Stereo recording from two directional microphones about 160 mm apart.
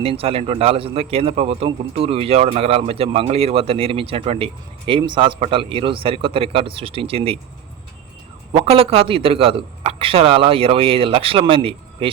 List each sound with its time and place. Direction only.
0.0 s a man's voice: 35° right (ahead or behind)
8.5 s a man's voice: 35° right (ahead or behind)